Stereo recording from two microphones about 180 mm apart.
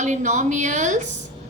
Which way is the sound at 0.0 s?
40° right (ahead or behind).